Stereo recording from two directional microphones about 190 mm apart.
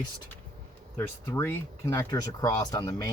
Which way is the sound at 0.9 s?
15° left (ahead or behind).